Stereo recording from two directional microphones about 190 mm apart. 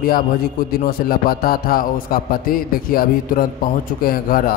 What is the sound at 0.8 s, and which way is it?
A man's voice, 50° left (ahead or behind).